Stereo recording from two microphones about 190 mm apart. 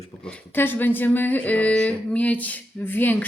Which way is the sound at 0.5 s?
10° left (ahead or behind).